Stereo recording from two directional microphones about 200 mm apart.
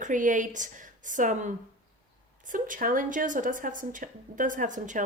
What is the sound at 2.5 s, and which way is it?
A woman's voice, 45° right (ahead or behind).